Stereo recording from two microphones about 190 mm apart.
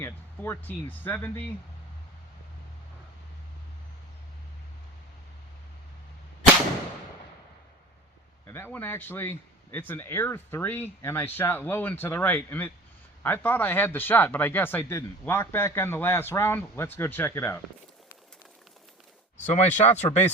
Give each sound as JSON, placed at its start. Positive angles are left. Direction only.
{"t": 0.0, "sound": "speech", "side_deg": 10}
{"t": 8.4, "sound": "speech", "side_deg": 10}
{"t": 19.4, "sound": "speech", "side_deg": 35}